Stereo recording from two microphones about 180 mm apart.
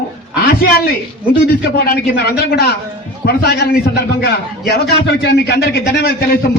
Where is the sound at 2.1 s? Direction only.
60° left (ahead or behind).